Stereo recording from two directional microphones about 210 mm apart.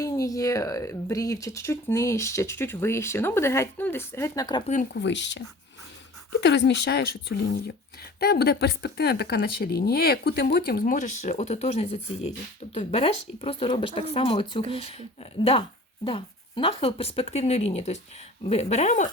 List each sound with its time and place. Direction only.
0.0 s speech: 15° left (ahead or behind)
4.9 s speech: 55° left (ahead or behind)
6.4 s speech: 55° left (ahead or behind); by 19.0 s 35° left (ahead or behind)